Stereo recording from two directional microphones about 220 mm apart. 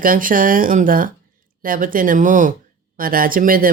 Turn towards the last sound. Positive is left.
turn(degrees=-40)  # may be behind; listen again after turning